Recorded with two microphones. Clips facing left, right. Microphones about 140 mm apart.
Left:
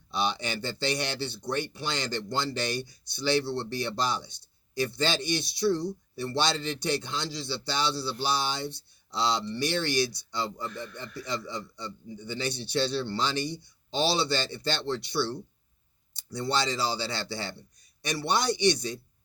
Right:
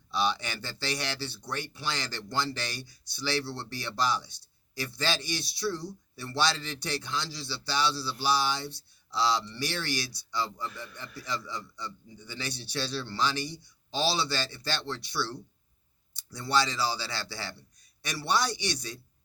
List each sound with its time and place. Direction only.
0.1 s speech: 20° left (ahead or behind)